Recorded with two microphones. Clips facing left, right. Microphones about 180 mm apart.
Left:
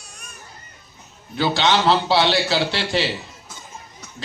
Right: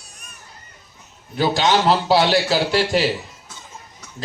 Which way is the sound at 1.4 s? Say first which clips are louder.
Right 2 dB; 40° right (ahead or behind).